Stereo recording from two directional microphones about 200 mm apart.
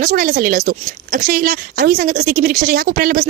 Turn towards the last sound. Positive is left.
turn(degrees=-45)  # may be behind; listen again after turning